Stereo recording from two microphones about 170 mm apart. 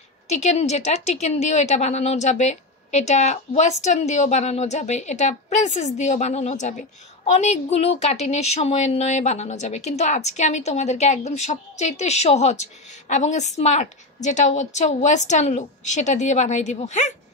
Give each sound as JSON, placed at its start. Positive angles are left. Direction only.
{"t": 0.3, "sound": "a woman's voice", "side_deg": 40}